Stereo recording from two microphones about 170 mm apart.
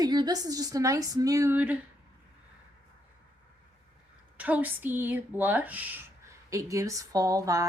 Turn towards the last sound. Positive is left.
turn(degrees=-20)  # may be behind; listen again after turning